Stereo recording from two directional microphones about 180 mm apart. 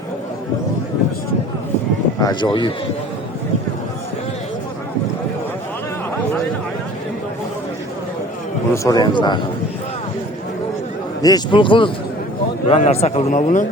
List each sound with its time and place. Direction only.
2.2 s a man's voice: 25° left (ahead or behind)
8.7 s a man's voice: 20° left (ahead or behind)
11.2 s a man's voice: 20° left (ahead or behind); by 13.7 s 45° left (ahead or behind)